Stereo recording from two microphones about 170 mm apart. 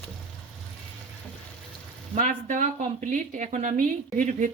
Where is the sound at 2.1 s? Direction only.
50° right (ahead or behind).